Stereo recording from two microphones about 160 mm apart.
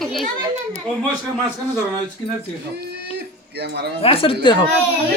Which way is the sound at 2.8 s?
90° right.